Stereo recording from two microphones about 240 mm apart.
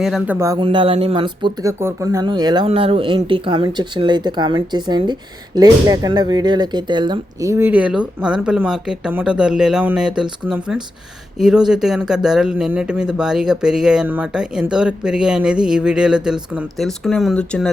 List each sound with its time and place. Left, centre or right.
0.0 s speech: centre